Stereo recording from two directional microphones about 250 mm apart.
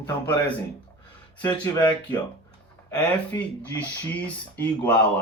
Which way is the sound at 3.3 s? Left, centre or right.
Centre.